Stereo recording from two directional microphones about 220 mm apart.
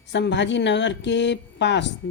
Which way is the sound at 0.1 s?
50° left (ahead or behind).